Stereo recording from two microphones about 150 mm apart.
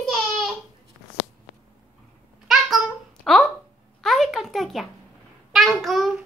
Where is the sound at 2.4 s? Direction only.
Centre (ahead or behind).